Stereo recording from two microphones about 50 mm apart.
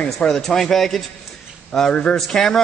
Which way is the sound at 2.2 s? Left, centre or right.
Centre.